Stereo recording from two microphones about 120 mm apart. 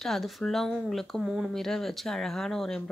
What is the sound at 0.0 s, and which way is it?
A woman's voice, 5° left (ahead or behind).